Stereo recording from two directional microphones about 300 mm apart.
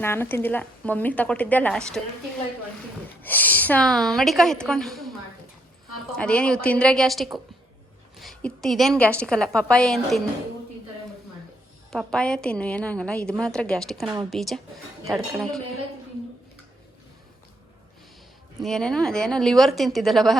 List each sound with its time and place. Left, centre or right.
0.0 s a woman's voice: centre
3.2 s a woman's voice: centre
6.1 s a woman's voice: centre
11.9 s a woman's voice: centre
18.6 s a woman's voice: centre